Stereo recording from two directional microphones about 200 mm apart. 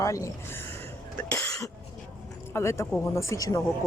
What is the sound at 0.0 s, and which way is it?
Speech, 15° left (ahead or behind).